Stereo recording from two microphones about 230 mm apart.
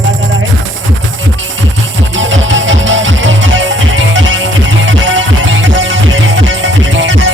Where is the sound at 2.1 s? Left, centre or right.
Right.